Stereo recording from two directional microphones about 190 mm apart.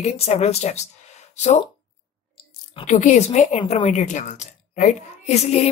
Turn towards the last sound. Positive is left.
turn(degrees=35)  # may be behind; listen again after turning